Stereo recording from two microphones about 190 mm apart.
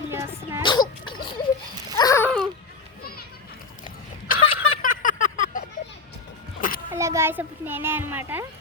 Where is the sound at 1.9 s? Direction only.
15° left (ahead or behind).